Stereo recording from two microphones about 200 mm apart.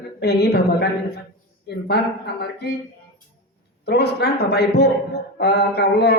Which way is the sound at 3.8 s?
55° left (ahead or behind).